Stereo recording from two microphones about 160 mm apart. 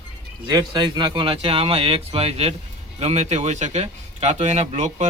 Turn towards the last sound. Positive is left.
turn(degrees=-45)  # may be behind; listen again after turning